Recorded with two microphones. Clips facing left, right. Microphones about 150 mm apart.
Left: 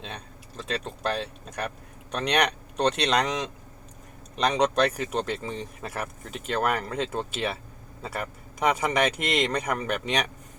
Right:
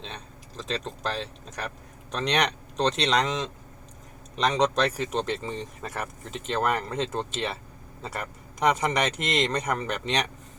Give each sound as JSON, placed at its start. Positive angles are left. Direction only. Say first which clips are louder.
{"t": 0.0, "sound": "speech", "louder": "left 1 dB", "side_deg": 5}